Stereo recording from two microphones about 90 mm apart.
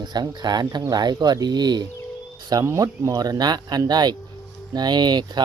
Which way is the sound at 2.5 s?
40° right (ahead or behind).